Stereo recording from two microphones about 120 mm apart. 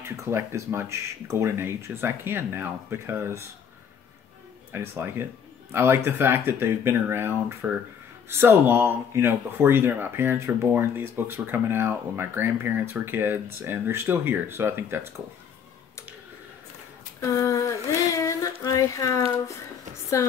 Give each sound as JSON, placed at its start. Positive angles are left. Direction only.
{"t": 0.0, "sound": "speech", "side_deg": -25}
{"t": 4.7, "sound": "speech", "side_deg": -20}
{"t": 17.2, "sound": "a sound", "side_deg": 25}